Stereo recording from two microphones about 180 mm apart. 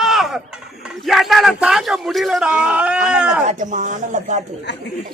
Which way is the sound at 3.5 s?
45° right (ahead or behind).